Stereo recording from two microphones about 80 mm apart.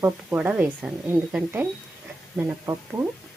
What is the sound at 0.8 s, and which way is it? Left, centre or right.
Speech, centre.